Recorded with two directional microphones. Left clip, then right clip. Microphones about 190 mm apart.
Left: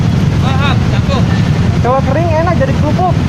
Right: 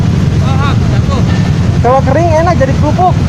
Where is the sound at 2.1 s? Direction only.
45° right (ahead or behind).